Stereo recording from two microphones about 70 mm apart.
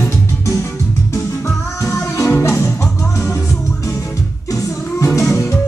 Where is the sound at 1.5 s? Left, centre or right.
Left.